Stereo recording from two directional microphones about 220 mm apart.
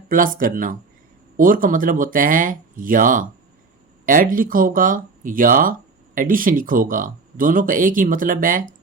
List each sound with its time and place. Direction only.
0.1 s speech: 40° right (ahead or behind)